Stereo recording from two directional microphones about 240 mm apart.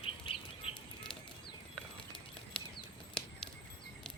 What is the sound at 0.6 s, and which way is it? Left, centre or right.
Bird flight, centre.